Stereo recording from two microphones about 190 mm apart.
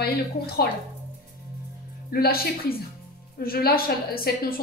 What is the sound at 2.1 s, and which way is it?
A woman's voice, 50° left (ahead or behind).